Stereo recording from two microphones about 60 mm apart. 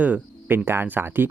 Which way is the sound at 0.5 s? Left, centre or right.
Right.